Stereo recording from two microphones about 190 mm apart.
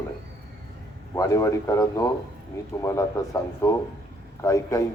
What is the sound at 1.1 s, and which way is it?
A man's voice, 15° left (ahead or behind).